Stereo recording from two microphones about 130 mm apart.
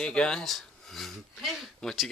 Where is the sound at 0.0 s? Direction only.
5° left (ahead or behind).